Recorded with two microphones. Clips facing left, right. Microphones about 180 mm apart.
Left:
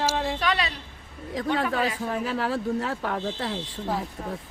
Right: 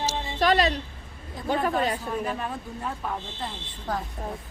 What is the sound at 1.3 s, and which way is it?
Speech, 90° left.